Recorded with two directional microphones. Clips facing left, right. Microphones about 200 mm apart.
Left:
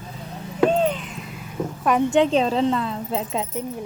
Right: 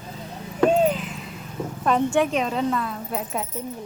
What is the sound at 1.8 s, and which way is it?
Speech, 15° left (ahead or behind).